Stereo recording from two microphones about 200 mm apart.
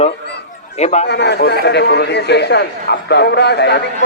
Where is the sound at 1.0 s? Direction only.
55° left (ahead or behind).